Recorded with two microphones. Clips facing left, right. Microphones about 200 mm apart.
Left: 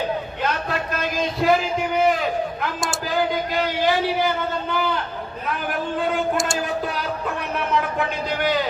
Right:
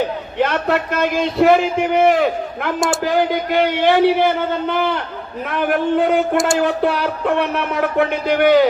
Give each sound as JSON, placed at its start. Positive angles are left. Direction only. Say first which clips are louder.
{"t": 0.3, "sound": "a man's voice", "louder": "right 7 dB", "side_deg": -65}
{"t": 5.5, "sound": "music", "louder": "right 9 dB", "side_deg": -65}